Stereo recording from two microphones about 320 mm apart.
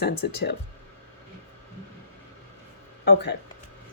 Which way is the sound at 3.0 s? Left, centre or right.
Left.